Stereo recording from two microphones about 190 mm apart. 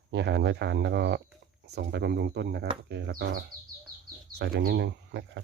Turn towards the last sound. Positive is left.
turn(degrees=-65)  # may be behind; listen again after turning